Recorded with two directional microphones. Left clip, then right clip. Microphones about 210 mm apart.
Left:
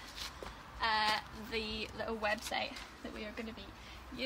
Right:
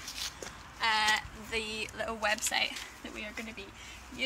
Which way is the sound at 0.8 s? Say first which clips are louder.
Right 4 dB; 10° left (ahead or behind).